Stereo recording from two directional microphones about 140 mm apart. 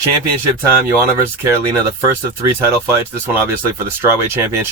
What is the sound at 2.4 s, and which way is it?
Speech, 20° right (ahead or behind).